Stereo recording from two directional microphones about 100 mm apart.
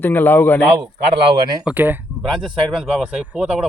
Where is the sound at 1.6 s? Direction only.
15° right (ahead or behind).